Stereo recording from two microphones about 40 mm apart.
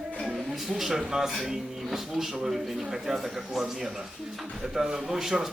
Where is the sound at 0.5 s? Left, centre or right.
Centre.